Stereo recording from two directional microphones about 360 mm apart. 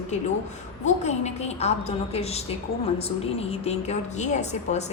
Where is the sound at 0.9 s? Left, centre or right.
Centre.